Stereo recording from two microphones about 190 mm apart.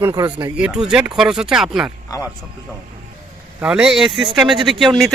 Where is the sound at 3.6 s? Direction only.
5° right (ahead or behind).